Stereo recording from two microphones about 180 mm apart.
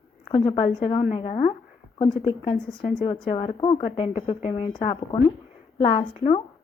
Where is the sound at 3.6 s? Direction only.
25° left (ahead or behind).